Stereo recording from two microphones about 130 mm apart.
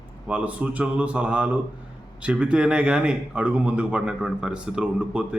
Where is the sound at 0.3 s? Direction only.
10° right (ahead or behind).